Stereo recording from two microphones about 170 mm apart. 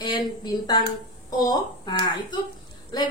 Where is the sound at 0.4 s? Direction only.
25° left (ahead or behind).